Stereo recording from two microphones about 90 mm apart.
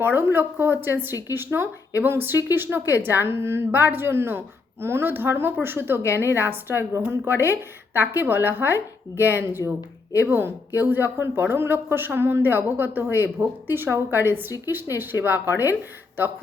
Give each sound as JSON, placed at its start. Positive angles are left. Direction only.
{"t": 0.0, "sound": "a woman's voice", "side_deg": -25}